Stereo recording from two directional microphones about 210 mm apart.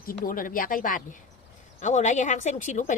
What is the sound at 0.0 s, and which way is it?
Speech, 40° left (ahead or behind).